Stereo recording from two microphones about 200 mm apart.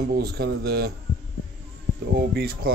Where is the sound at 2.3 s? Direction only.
50° right (ahead or behind).